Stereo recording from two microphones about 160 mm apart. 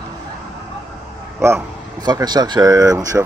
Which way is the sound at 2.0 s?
25° right (ahead or behind).